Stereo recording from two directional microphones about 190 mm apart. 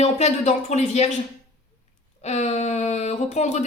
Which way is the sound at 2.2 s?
35° left (ahead or behind).